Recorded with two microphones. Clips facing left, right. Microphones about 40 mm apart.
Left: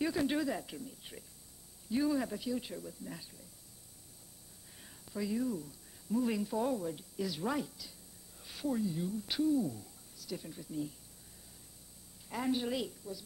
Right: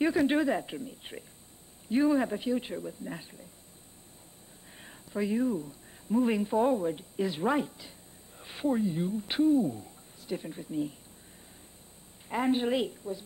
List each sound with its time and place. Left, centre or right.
0.0 s speech: right
4.8 s speech: right
12.3 s speech: right